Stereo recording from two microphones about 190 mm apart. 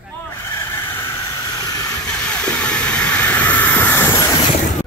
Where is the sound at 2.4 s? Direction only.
5° left (ahead or behind).